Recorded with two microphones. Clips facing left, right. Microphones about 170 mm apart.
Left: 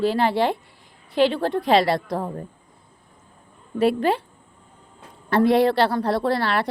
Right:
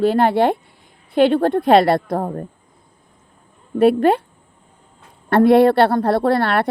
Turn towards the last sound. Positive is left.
turn(degrees=-55)  # may be behind; listen again after turning